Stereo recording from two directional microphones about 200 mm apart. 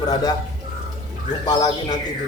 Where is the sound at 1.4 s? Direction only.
20° left (ahead or behind).